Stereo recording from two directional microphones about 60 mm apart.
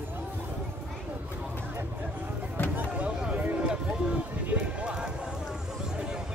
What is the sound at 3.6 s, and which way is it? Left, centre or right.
Music, centre.